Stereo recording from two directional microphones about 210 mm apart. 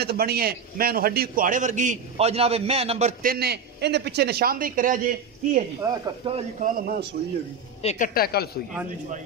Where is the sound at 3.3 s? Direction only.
50° right (ahead or behind).